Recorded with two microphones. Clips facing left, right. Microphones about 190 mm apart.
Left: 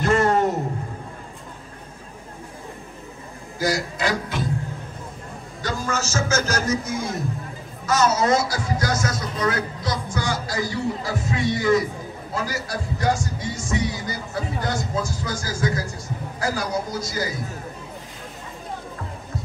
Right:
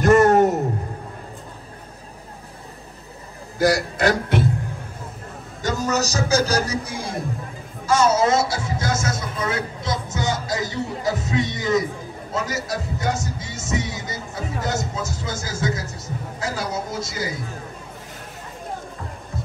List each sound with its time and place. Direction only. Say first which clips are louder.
0.0 s a sound: right 5 dB; 45° right (ahead or behind)
3.5 s speech: right 5 dB; 65° right (ahead or behind)
5.6 s a man's voice: right 4 dB; 45° right (ahead or behind); by 17.4 s 25° right (ahead or behind)